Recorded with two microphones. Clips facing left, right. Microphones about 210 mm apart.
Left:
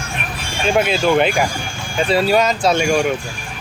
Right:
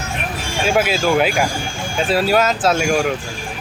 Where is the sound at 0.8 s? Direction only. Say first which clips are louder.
Left 2 dB; 5° right (ahead or behind).